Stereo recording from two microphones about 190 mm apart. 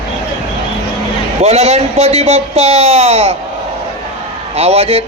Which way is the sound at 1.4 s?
35° right (ahead or behind).